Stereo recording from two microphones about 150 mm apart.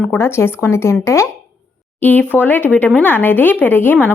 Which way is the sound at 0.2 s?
15° left (ahead or behind).